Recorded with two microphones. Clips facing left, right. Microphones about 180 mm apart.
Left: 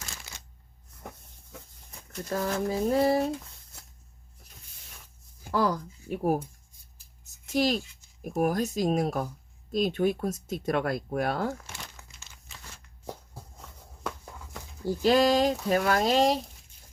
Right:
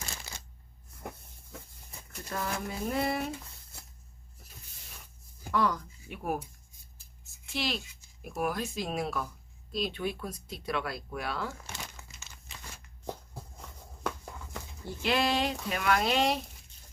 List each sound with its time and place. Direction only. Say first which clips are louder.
0.3 s shuffling cards: right 2 dB; 30° right (ahead or behind)
2.3 s speech: left 7 dB; 35° left (ahead or behind)
5.5 s speech: left 3 dB; 35° left (ahead or behind)
7.3 s a sound: left 9 dB; 40° left (ahead or behind)
8.2 s speech: left 6 dB; 45° left (ahead or behind)
11.7 s crumpling: right 1 dB; centre (ahead or behind)
14.8 s speech: left 7 dB; 40° left (ahead or behind)